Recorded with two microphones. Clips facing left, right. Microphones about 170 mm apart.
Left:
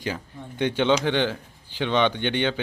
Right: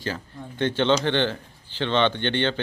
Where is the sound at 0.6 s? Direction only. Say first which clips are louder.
Even; 10° left (ahead or behind).